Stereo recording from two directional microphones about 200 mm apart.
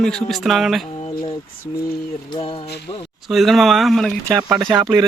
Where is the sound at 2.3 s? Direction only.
25° left (ahead or behind).